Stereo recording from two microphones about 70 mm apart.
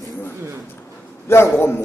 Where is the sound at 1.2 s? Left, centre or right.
Left.